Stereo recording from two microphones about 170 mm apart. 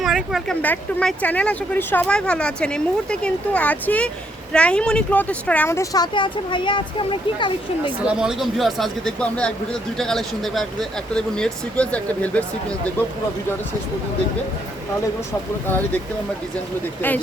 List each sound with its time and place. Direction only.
0.0 s speech: centre (ahead or behind)
0.6 s speech: 10° left (ahead or behind); by 7.9 s 30° left (ahead or behind)
8.0 s speech: 5° right (ahead or behind)
15.6 s speech: 10° left (ahead or behind)